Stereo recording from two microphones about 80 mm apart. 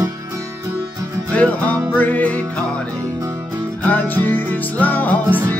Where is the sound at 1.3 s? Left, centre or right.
Centre.